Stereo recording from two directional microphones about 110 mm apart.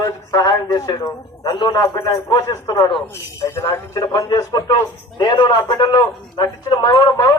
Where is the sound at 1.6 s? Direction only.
45° left (ahead or behind).